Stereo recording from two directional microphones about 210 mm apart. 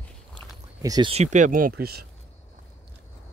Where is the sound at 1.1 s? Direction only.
35° right (ahead or behind).